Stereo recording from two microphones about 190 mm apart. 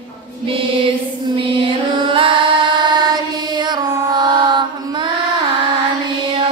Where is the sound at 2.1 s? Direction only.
25° right (ahead or behind).